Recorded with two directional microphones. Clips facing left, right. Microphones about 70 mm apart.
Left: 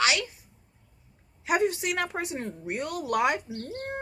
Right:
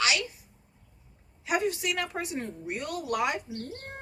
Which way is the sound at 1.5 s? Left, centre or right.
Left.